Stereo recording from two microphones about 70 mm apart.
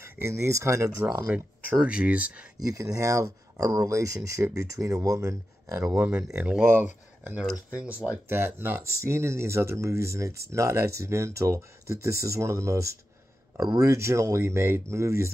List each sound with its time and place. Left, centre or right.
0.0 s speech: right
1.3 s speech: centre
2.5 s speech: right
6.3 s speech: centre
8.3 s speech: right